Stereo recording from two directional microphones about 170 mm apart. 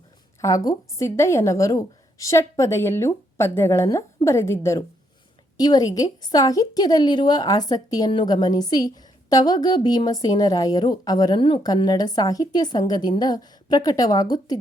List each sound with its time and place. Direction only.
0.4 s a woman's voice: 20° left (ahead or behind)